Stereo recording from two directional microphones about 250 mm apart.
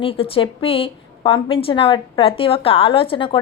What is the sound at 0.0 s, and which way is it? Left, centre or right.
A woman's voice, left.